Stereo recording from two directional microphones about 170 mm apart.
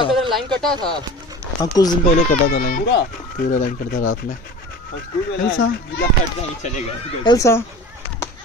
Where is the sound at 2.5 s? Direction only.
60° left (ahead or behind); by 3.4 s 85° left.